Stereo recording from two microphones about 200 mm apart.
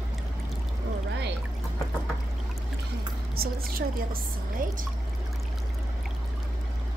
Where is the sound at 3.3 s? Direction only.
50° right (ahead or behind).